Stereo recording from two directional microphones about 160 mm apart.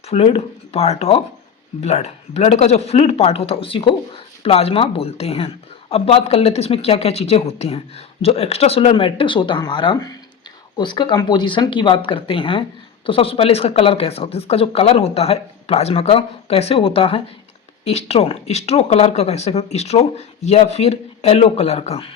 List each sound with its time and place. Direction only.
0.1 s speech: 40° left (ahead or behind)